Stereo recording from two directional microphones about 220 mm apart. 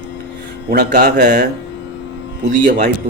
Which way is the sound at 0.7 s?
45° right (ahead or behind).